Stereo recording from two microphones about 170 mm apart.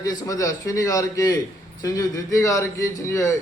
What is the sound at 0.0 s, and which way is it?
A man's voice, 20° left (ahead or behind).